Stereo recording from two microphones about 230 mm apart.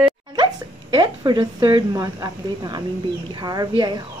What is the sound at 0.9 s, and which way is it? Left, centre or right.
A woman's voice, centre.